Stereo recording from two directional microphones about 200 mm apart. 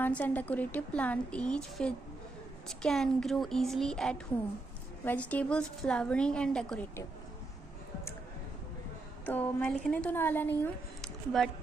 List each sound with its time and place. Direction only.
0.0 s a woman's voice: 10° left (ahead or behind)
9.2 s a woman's voice: 5° left (ahead or behind)